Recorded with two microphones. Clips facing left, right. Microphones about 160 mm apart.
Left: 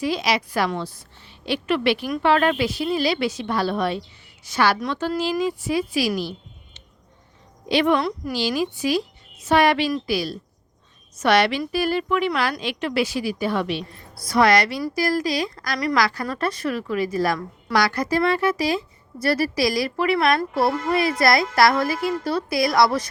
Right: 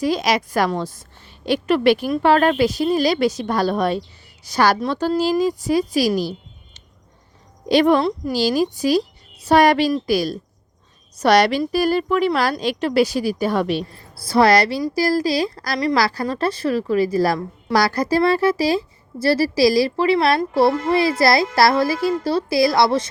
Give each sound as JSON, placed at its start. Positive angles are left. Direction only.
{"t": 0.0, "sound": "a woman's voice", "side_deg": -45}
{"t": 7.7, "sound": "a woman's voice", "side_deg": -40}